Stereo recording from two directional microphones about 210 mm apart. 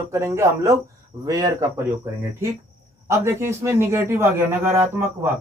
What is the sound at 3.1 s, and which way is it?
A man's voice, 15° right (ahead or behind).